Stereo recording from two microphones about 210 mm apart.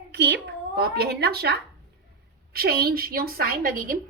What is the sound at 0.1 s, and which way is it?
A woman's voice, 50° right (ahead or behind).